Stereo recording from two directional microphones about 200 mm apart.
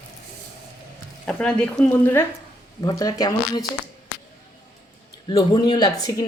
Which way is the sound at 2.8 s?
20° left (ahead or behind).